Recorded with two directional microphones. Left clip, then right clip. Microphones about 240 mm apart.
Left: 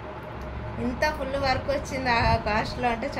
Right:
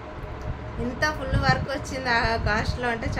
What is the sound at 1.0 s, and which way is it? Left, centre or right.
A woman's voice, centre.